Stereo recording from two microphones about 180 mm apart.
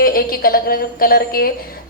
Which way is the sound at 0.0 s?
55° left (ahead or behind).